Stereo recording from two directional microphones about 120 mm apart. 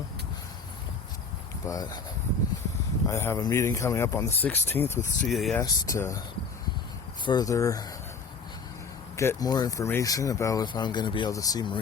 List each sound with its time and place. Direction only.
1.6 s speech: 30° left (ahead or behind)
3.1 s speech: 25° left (ahead or behind)
5.3 s speech: centre (ahead or behind)
5.6 s speech: 30° left (ahead or behind)
7.3 s speech: 30° left (ahead or behind)
9.1 s speech: 20° left (ahead or behind)
9.4 s speech: 30° left (ahead or behind)
11.3 s speech: 30° left (ahead or behind)